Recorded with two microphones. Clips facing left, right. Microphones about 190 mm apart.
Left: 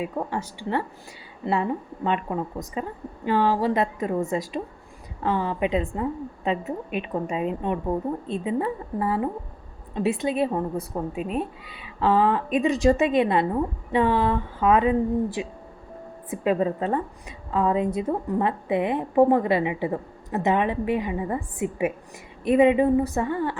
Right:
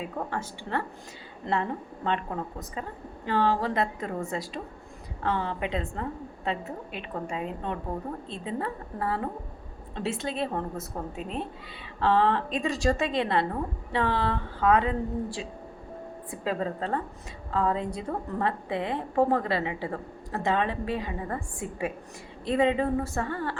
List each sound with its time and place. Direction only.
0.0 s a woman's voice: 15° left (ahead or behind)
2.0 s a woman's voice: 15° left (ahead or behind)